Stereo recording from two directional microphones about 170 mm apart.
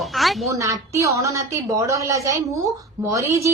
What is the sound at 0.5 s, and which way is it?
A woman's voice, 20° right (ahead or behind).